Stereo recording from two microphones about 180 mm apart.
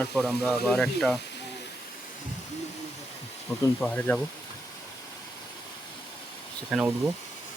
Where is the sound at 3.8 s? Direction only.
5° left (ahead or behind).